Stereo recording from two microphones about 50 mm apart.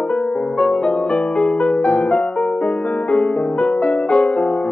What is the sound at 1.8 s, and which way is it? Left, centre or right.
Music, centre.